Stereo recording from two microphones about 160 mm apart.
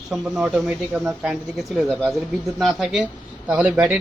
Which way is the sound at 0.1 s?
5° right (ahead or behind).